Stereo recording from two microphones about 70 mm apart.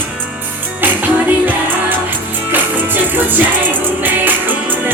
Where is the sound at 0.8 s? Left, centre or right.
Right.